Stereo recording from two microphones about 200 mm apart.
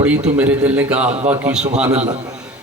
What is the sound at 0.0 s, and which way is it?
A man's voice, 5° right (ahead or behind).